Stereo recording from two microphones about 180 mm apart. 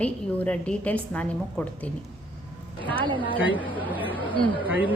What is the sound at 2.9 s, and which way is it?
Speech, 25° right (ahead or behind).